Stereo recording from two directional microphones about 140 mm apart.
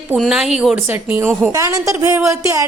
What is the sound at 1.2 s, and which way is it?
Speech, 15° right (ahead or behind).